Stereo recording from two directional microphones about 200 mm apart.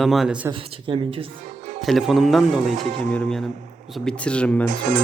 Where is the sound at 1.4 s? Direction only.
40° right (ahead or behind).